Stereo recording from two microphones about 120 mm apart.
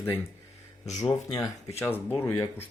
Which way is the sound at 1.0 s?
30° left (ahead or behind).